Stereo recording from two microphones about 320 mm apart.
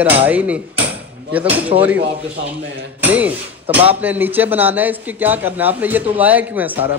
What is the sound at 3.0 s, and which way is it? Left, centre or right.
Speech, centre.